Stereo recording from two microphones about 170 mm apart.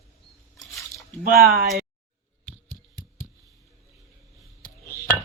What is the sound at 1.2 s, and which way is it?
Speech, 60° right (ahead or behind).